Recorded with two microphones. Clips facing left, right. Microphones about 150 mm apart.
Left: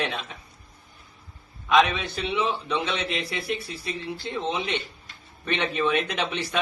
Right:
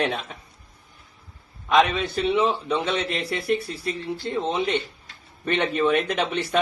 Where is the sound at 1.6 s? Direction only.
45° right (ahead or behind).